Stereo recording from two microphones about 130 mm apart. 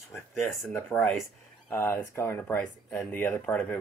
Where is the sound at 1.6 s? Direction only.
15° left (ahead or behind).